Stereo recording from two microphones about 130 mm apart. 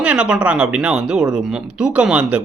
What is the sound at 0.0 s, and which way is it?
A woman's voice, 10° right (ahead or behind).